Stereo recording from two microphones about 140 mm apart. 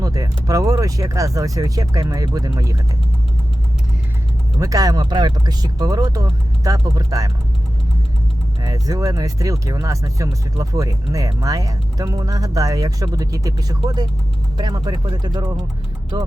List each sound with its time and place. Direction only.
0.0 s speech: 25° right (ahead or behind)
4.6 s speech: 25° right (ahead or behind)
8.6 s speech: 25° right (ahead or behind)